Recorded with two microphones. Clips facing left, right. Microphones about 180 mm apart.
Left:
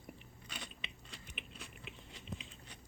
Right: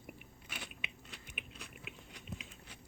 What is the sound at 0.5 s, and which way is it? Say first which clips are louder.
Biting: right 1 dB; 5° right (ahead or behind).